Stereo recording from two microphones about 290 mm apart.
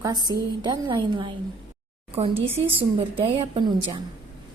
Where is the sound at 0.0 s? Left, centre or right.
Centre.